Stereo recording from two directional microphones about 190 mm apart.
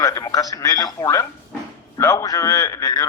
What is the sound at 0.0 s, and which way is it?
A man's voice, 15° left (ahead or behind).